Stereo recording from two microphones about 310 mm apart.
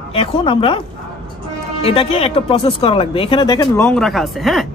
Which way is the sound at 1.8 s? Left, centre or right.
Centre.